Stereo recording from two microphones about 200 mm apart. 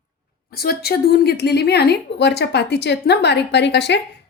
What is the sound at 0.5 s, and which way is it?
A woman's voice, 50° left (ahead or behind).